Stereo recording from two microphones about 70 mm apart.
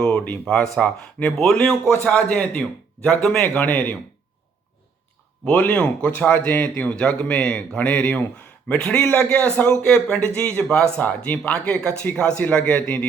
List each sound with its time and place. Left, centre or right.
0.0 s a man's voice: centre
5.5 s a man's voice: left
11.0 s a man's voice: left